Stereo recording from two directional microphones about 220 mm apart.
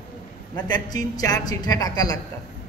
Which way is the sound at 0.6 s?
20° left (ahead or behind).